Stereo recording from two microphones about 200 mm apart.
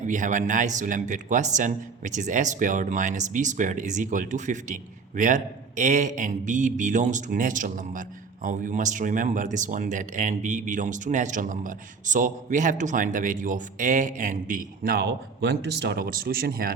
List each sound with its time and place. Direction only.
0.1 s speech: 40° right (ahead or behind)